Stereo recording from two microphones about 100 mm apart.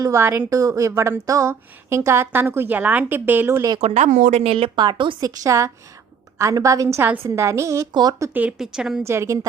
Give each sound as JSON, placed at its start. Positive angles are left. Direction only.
{"t": 0.0, "sound": "a woman's voice", "side_deg": -25}
{"t": 3.8, "sound": "speech", "side_deg": -90}
{"t": 4.7, "sound": "speech", "side_deg": -45}
{"t": 5.4, "sound": "a woman's voice", "side_deg": -30}
{"t": 8.3, "sound": "speech", "side_deg": -15}
{"t": 8.5, "sound": "a woman's voice", "side_deg": -5}
{"t": 9.0, "sound": "a woman's voice", "side_deg": -30}